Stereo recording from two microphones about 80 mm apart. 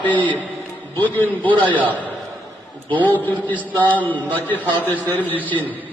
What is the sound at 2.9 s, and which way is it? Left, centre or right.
A man's voice, left.